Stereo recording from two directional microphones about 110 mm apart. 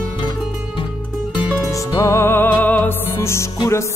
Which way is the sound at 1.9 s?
25° left (ahead or behind).